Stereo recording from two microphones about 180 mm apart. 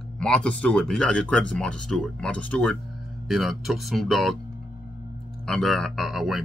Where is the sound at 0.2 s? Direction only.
5° left (ahead or behind).